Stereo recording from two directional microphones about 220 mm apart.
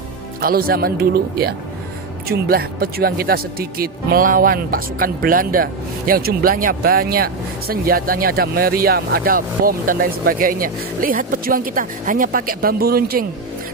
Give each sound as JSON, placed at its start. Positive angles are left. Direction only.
{"t": 0.4, "sound": "speech", "side_deg": -40}